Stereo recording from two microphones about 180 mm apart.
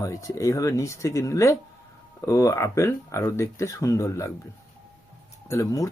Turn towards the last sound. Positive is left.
turn(degrees=15)  # may be behind; listen again after turning